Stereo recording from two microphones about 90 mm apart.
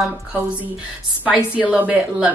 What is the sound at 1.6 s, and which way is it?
Speech, 15° right (ahead or behind).